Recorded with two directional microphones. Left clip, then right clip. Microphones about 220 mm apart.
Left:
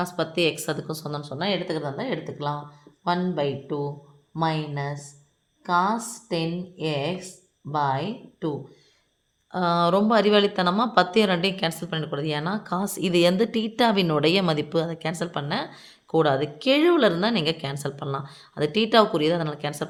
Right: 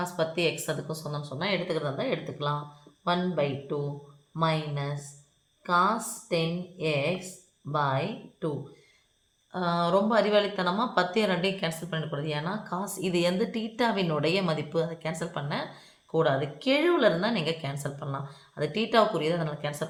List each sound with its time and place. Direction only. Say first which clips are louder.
0.0 s a woman's voice: left 4 dB; 50° left (ahead or behind)